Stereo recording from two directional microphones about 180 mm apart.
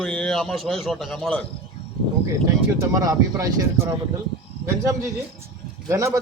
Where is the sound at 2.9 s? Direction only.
20° right (ahead or behind).